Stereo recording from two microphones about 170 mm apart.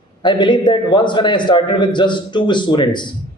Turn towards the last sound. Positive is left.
turn(degrees=25)  # may be behind; listen again after turning